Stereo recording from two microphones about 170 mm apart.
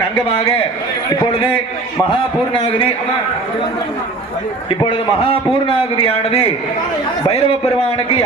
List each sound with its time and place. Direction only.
2.0 s a man's voice: 30° left (ahead or behind)
4.7 s a man's voice: 30° left (ahead or behind)